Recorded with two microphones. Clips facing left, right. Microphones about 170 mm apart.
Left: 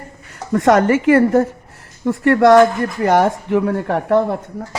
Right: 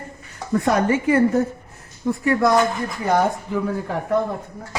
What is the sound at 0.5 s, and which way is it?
A woman's voice, 85° left.